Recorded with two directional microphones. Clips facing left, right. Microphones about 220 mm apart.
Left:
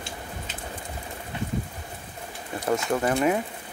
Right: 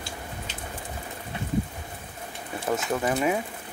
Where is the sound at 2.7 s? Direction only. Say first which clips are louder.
Left 2 dB; centre (ahead or behind).